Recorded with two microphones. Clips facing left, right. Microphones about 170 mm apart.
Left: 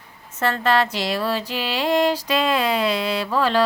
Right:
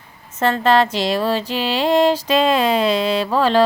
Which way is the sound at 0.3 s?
25° right (ahead or behind).